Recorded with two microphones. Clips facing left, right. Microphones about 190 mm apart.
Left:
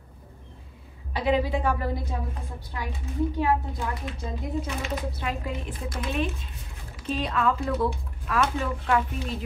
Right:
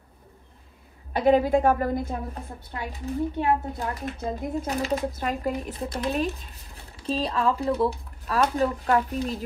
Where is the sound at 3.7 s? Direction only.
40° right (ahead or behind).